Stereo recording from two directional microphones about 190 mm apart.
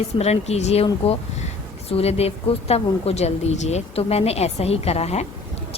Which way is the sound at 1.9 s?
30° left (ahead or behind).